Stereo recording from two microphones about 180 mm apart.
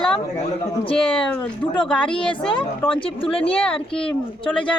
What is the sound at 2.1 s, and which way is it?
Speech, 25° left (ahead or behind).